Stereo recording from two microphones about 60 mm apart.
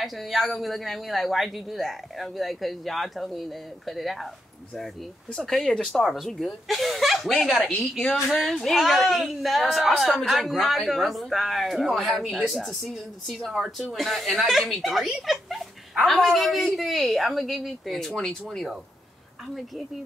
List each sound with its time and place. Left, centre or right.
0.0 s speech: centre
5.4 s speech: centre